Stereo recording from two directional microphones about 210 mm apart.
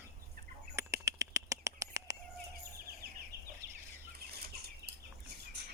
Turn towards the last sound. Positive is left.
turn(degrees=-50)  # may be behind; listen again after turning